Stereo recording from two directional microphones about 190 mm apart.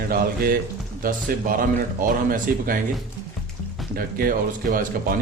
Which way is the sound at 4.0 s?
50° right (ahead or behind).